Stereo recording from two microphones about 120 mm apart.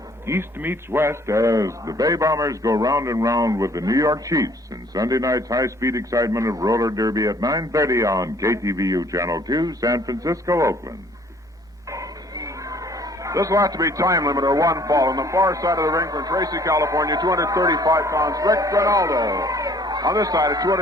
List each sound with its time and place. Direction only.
0.3 s a man's voice: 20° right (ahead or behind)
11.9 s speech: 25° right (ahead or behind)